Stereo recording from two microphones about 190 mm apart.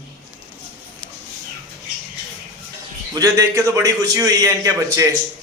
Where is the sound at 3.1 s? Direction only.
15° right (ahead or behind).